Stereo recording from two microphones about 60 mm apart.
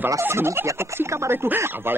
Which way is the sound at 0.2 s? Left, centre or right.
Right.